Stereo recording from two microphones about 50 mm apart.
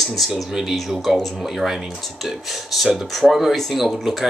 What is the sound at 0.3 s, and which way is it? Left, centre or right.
Speech, centre.